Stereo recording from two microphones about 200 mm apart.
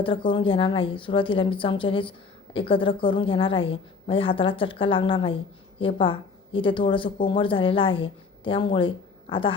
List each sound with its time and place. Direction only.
0.0 s a woman's voice: 25° left (ahead or behind)